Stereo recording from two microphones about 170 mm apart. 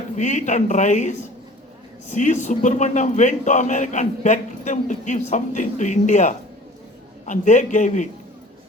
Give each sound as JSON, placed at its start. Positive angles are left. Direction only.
{"t": 0.2, "sound": "a man's voice", "side_deg": 45}